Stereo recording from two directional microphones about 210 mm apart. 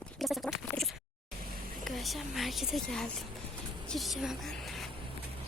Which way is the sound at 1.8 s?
Centre (ahead or behind).